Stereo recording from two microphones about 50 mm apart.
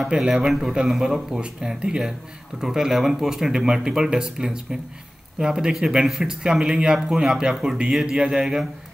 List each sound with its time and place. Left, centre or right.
0.1 s speech: centre